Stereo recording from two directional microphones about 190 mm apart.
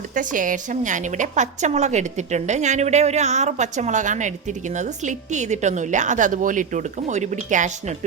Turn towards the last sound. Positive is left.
turn(degrees=-40)  # may be behind; listen again after turning